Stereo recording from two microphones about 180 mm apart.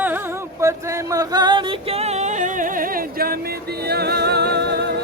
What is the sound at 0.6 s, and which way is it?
Music, 15° right (ahead or behind).